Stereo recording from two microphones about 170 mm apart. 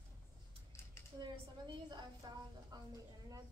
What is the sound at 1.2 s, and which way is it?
A woman's voice, 25° right (ahead or behind).